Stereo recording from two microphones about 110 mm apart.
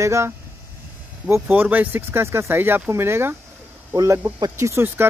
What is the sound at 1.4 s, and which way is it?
Speech, 15° right (ahead or behind).